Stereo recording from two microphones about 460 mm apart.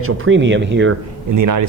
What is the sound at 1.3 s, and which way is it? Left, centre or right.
Speech, right.